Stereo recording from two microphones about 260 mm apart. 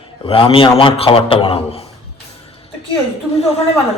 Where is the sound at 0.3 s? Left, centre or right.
Left.